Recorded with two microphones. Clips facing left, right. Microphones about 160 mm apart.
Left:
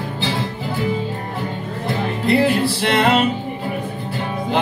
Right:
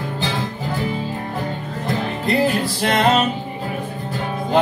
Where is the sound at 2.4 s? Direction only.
45° right (ahead or behind).